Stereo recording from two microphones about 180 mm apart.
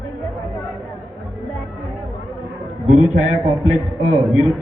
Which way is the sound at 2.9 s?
5° right (ahead or behind).